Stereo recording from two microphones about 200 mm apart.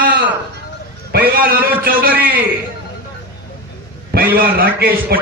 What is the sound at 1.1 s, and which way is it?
Speech, 45° right (ahead or behind).